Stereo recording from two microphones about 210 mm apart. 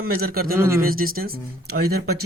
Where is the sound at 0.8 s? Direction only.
45° right (ahead or behind).